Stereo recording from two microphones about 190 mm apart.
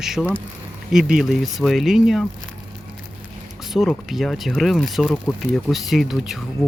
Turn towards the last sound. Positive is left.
turn(degrees=0)  # may be behind; listen again after turning